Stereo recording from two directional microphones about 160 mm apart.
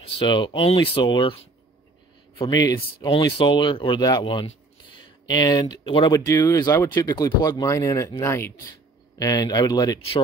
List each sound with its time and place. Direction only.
0.0 s speech: 35° left (ahead or behind)